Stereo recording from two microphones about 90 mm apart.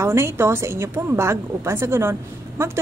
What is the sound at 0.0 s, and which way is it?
A woman's voice, 30° right (ahead or behind).